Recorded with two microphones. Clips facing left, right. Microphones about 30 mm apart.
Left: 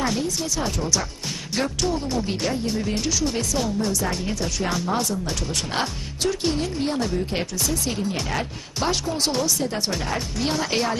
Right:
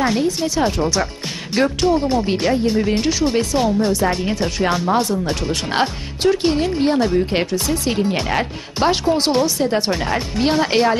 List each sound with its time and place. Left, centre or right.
0.0 s speech: right